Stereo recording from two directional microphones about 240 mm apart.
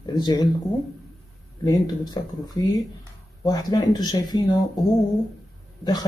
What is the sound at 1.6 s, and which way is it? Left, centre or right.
A man's voice, centre.